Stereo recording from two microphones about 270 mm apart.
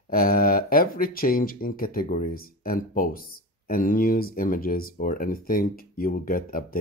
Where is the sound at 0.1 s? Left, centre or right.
Left.